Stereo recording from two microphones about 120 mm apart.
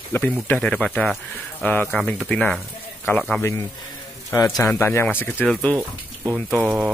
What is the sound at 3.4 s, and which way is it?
Speech, 25° left (ahead or behind).